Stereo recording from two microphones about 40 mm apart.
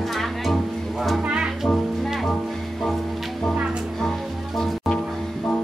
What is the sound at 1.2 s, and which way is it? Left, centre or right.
Music, right.